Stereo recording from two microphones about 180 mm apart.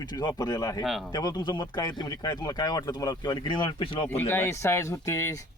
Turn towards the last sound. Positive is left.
turn(degrees=15)  # may be behind; listen again after turning